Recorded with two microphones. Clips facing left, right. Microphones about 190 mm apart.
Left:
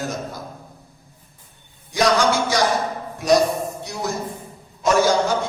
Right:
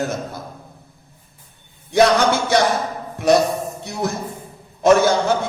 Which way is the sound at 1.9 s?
60° right (ahead or behind).